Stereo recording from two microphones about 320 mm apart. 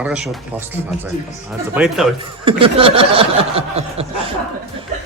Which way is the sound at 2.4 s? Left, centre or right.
Centre.